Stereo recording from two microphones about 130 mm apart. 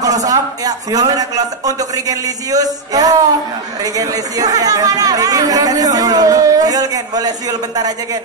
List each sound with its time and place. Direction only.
0.0 s speech: 30° right (ahead or behind)